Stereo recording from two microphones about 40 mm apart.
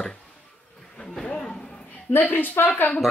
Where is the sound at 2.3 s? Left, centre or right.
Left.